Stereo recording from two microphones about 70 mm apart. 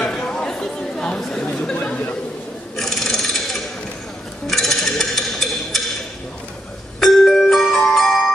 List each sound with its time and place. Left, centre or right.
0.0 s chatter: centre
2.8 s filing: centre
4.5 s a sound: centre
7.0 s marimba: centre